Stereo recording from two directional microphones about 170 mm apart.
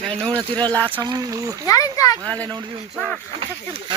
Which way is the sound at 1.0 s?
20° right (ahead or behind).